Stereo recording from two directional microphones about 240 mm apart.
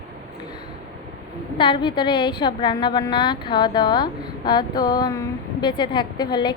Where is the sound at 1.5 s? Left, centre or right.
Left.